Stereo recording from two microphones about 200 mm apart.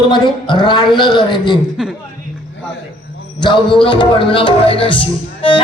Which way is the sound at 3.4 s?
25° left (ahead or behind).